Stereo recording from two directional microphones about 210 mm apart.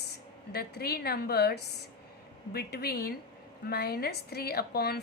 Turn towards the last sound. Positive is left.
turn(degrees=50)  # may be behind; listen again after turning